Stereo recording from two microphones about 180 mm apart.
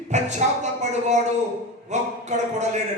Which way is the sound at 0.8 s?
40° right (ahead or behind).